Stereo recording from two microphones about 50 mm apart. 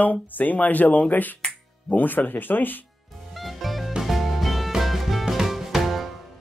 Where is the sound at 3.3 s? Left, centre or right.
Centre.